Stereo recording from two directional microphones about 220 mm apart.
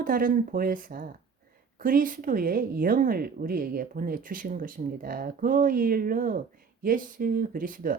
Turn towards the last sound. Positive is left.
turn(degrees=-40)  # may be behind; listen again after turning